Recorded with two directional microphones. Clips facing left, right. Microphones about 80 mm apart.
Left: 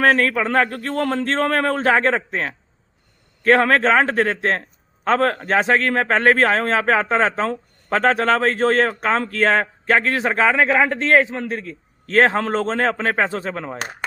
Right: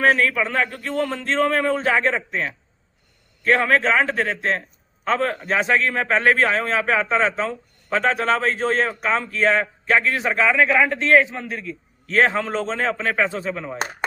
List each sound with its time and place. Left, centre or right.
0.0 s a man's voice: left
5.8 s a man's voice: left